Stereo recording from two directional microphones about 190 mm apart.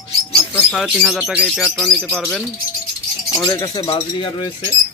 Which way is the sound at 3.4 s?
20° left (ahead or behind).